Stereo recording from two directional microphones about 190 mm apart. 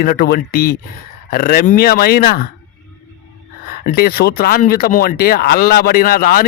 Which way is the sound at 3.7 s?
50° left (ahead or behind).